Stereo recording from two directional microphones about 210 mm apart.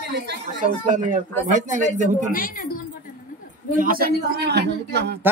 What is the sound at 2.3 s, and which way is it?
Speech, 45° left (ahead or behind).